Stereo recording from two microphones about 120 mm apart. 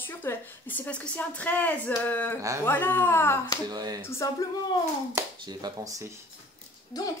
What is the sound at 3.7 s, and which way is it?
Speech, 35° right (ahead or behind).